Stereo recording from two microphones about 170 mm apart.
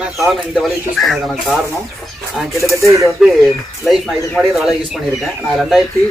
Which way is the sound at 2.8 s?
15° right (ahead or behind).